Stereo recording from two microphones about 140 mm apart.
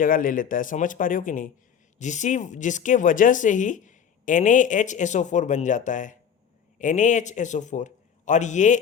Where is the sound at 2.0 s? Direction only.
60° left (ahead or behind).